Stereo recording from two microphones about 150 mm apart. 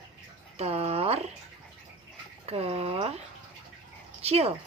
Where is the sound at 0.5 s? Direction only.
45° right (ahead or behind).